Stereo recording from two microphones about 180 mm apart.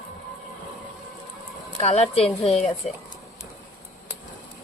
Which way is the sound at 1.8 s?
35° left (ahead or behind).